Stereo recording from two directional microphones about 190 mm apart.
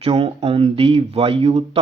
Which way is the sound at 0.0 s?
30° right (ahead or behind).